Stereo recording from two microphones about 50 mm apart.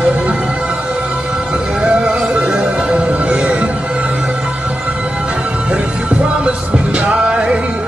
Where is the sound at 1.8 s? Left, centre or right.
Centre.